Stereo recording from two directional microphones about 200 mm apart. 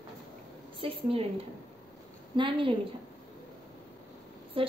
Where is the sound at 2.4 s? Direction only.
25° right (ahead or behind).